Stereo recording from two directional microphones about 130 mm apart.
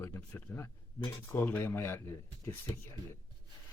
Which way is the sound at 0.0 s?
15° left (ahead or behind).